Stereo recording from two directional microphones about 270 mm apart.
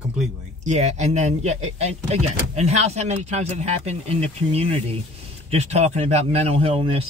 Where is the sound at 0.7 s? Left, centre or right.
Right.